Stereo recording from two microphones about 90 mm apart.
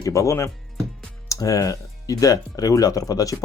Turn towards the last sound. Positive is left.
turn(degrees=40)  # may be behind; listen again after turning